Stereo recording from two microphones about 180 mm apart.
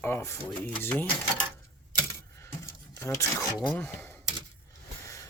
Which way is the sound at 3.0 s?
15° left (ahead or behind).